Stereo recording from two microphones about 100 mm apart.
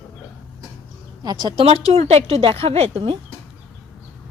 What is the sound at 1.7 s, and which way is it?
A woman's voice, 85° right.